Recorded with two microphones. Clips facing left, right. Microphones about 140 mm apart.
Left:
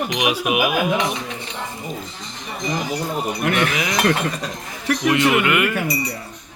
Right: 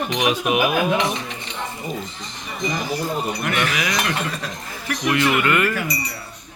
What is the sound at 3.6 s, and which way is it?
Speech, 25° left (ahead or behind).